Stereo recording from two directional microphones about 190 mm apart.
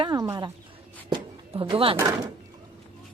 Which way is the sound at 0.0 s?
20° right (ahead or behind).